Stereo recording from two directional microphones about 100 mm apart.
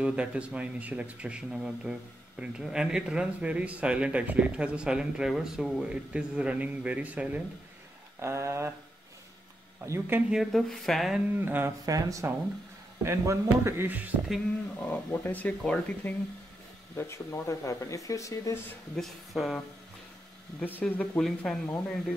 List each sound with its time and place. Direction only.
0.0 s speech: 10° right (ahead or behind)
8.2 s a man's voice: 25° right (ahead or behind)
9.8 s a man's voice: 20° right (ahead or behind)
10.3 s speech: centre (ahead or behind)
11.3 s a man's voice: 20° right (ahead or behind)
11.8 s a man's voice: 35° right (ahead or behind)
13.8 s speech: 15° right (ahead or behind)
15.0 s speech: 20° left (ahead or behind)
16.9 s speech: 30° left (ahead or behind)
18.9 s speech: centre (ahead or behind)
20.6 s speech: 15° left (ahead or behind)